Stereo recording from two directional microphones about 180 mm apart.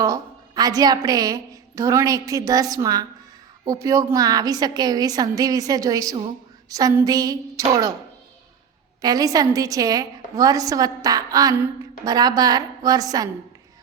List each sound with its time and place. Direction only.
0.0 s a woman's voice: 20° right (ahead or behind)
9.0 s a woman's voice: 20° right (ahead or behind)